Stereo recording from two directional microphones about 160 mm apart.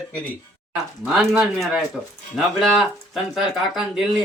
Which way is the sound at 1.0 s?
5° right (ahead or behind).